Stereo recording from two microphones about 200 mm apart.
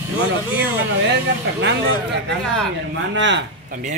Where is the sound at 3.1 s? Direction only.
65° right (ahead or behind).